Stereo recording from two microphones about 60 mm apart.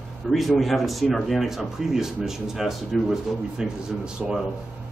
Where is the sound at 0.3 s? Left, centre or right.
Centre.